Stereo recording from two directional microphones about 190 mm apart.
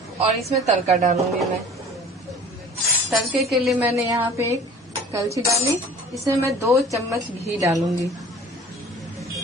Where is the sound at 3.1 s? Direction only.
Centre (ahead or behind).